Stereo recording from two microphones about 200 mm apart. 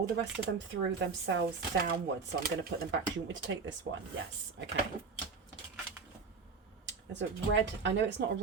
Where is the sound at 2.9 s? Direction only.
70° right (ahead or behind).